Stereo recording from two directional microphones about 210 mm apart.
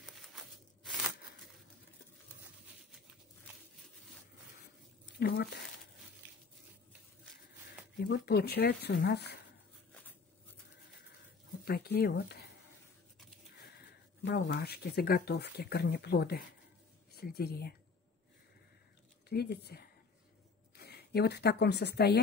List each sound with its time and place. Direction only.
5.2 s speech: 45° left (ahead or behind)
8.1 s speech: 50° left (ahead or behind)
11.6 s speech: 45° left (ahead or behind)
14.2 s speech: 55° left (ahead or behind)
19.2 s speech: 50° left (ahead or behind)